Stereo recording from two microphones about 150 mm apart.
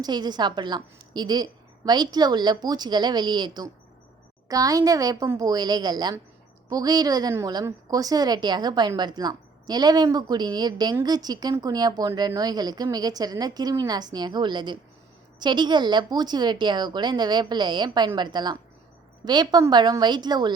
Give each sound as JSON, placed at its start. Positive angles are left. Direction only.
{"t": 0.0, "sound": "a woman's voice", "side_deg": -30}